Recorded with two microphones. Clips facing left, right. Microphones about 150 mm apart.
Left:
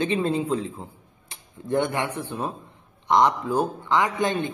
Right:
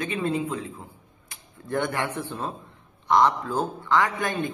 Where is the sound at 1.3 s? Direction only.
20° left (ahead or behind).